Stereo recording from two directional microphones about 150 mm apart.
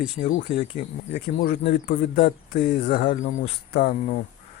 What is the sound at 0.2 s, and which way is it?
Speech, 50° left (ahead or behind).